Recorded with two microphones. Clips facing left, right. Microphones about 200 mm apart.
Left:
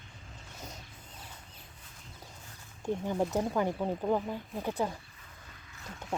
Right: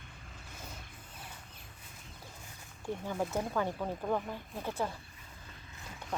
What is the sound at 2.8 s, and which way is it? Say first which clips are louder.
Speech: left 5 dB; 20° left (ahead or behind).